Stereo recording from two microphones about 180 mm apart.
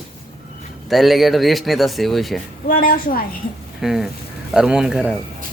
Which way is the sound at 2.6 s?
50° left (ahead or behind).